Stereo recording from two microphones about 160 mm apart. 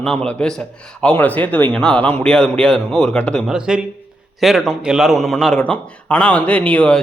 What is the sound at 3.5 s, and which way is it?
A man's voice, 5° right (ahead or behind).